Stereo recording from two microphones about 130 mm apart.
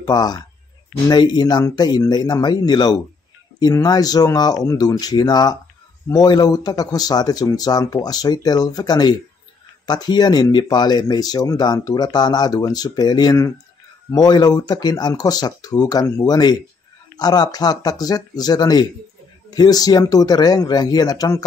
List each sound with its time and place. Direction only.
0.0 s speech: 30° left (ahead or behind)